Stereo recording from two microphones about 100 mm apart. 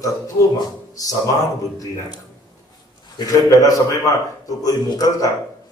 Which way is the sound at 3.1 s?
40° left (ahead or behind).